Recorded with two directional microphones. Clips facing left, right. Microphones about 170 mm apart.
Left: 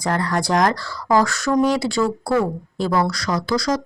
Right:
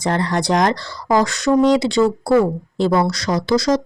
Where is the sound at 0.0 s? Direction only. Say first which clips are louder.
Right 2 dB; 25° right (ahead or behind).